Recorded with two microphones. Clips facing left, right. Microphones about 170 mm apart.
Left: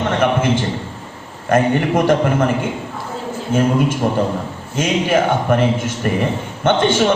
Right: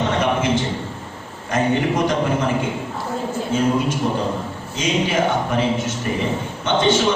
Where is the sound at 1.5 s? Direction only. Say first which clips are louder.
Left 4 dB; 55° left (ahead or behind).